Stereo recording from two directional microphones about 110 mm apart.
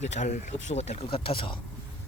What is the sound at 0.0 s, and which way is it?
Speech, 90° left.